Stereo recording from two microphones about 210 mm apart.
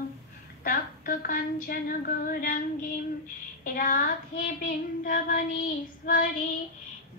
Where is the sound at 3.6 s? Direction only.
40° left (ahead or behind).